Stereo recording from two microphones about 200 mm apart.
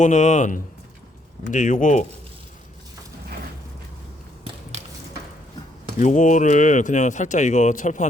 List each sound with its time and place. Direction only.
0.0 s speech: 35° left (ahead or behind)
6.0 s speech: 40° left (ahead or behind)